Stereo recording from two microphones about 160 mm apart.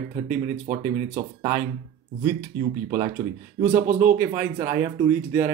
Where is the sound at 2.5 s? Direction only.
65° right (ahead or behind).